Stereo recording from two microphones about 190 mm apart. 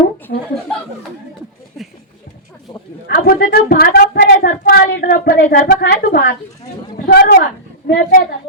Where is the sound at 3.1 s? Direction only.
50° left (ahead or behind).